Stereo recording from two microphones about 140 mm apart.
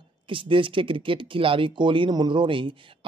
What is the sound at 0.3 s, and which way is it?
Speech, 35° right (ahead or behind).